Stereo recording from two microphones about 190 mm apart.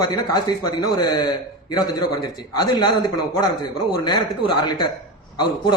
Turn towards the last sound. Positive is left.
turn(degrees=25)  # may be behind; listen again after turning